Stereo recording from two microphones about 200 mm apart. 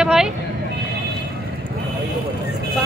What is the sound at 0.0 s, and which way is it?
Vehicle, 5° right (ahead or behind).